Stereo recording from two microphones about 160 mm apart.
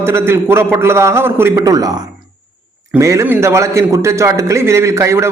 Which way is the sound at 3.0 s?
20° right (ahead or behind).